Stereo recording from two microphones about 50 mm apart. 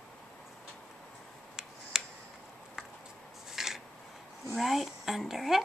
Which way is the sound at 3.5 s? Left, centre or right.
Centre.